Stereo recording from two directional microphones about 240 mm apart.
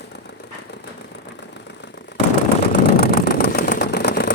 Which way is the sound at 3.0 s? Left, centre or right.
Left.